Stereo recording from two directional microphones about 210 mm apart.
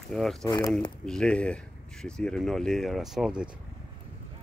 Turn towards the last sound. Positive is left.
turn(degrees=0)  # may be behind; listen again after turning